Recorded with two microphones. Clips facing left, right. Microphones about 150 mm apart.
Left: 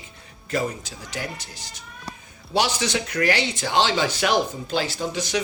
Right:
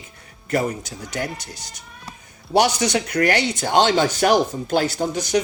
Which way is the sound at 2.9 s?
45° right (ahead or behind).